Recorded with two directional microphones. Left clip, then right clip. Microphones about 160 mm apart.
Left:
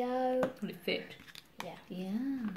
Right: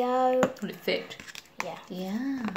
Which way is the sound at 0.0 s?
5° left (ahead or behind).